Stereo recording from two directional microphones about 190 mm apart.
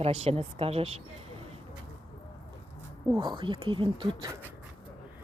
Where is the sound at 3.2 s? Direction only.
25° right (ahead or behind).